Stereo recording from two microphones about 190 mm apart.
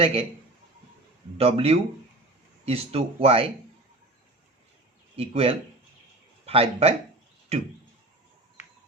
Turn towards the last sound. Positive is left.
turn(degrees=-35)  # may be behind; listen again after turning